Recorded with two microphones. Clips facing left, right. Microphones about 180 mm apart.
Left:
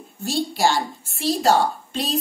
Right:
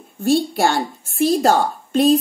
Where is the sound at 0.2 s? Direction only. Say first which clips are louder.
Right 5 dB; 55° right (ahead or behind).